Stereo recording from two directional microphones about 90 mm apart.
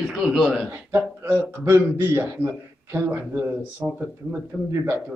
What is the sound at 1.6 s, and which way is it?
A man's voice, 30° right (ahead or behind).